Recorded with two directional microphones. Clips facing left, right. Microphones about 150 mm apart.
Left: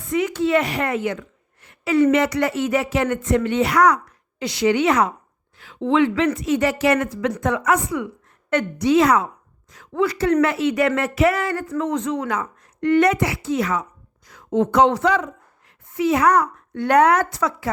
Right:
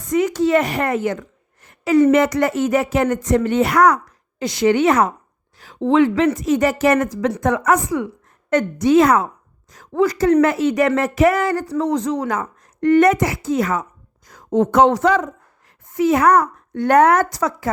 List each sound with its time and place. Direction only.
0.0 s speech: 40° right (ahead or behind)